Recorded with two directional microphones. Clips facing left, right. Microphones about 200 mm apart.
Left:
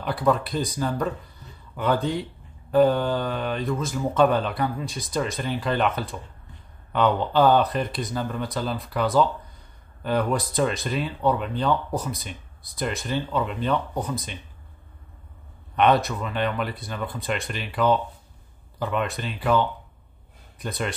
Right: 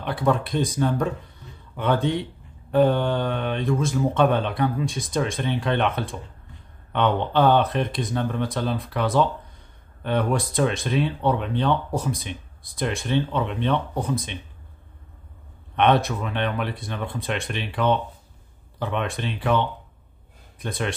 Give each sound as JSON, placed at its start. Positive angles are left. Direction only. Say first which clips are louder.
{"t": 0.3, "sound": "speech", "louder": "right 1 dB", "side_deg": 0}
{"t": 15.7, "sound": "speech", "louder": "even", "side_deg": 0}
{"t": 20.6, "sound": "speech", "louder": "right 1 dB", "side_deg": 0}